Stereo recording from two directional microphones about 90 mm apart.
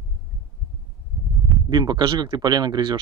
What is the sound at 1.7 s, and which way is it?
Speech, 50° right (ahead or behind).